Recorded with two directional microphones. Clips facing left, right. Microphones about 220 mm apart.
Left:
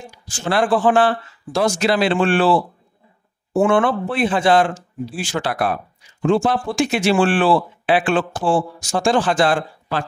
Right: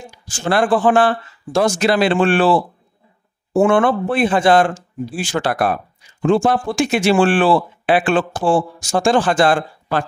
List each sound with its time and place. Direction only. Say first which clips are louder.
0.5 s speech: right 2 dB; 50° right (ahead or behind)
3.5 s speech: right 2 dB; 45° right (ahead or behind)